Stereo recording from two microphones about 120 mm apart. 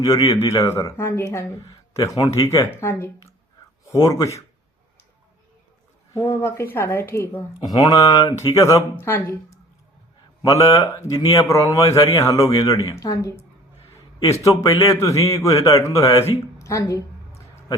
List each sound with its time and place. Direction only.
0.4 s a man's voice: 25° left (ahead or behind)
6.1 s a man's voice: 20° left (ahead or behind)
7.7 s a man's voice: 35° left (ahead or behind)
14.2 s a man's voice: 60° left (ahead or behind)
14.4 s a man's voice: 30° left (ahead or behind)